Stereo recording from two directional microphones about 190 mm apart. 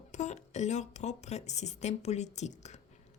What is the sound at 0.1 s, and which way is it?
Speech, 40° left (ahead or behind).